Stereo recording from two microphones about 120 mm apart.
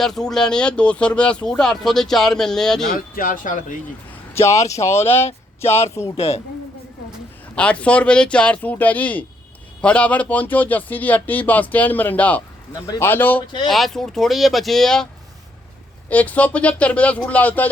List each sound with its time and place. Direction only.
0.0 s speech: 5° left (ahead or behind)
3.4 s speech: 90° left
4.4 s speech: 20° left (ahead or behind)
6.1 s a woman's voice: 55° left (ahead or behind)
7.5 s speech: 10° left (ahead or behind)
13.7 s speech: centre (ahead or behind)
16.0 s speech: 10° left (ahead or behind)